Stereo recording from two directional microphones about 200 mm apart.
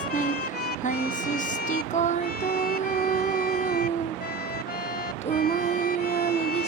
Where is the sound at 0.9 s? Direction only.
40° left (ahead or behind).